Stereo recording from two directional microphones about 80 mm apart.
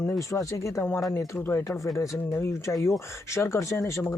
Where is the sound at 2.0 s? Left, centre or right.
Left.